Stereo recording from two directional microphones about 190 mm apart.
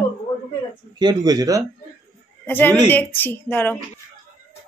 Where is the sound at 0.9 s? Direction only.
20° right (ahead or behind).